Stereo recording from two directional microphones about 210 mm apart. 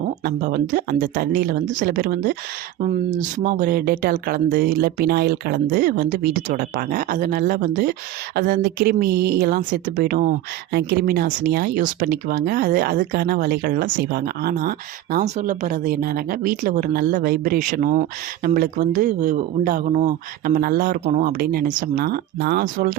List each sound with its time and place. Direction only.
0.0 s speech: 45° right (ahead or behind)